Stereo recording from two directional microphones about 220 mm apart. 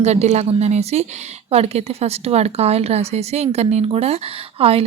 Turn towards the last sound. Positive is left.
turn(degrees=-25)  # may be behind; listen again after turning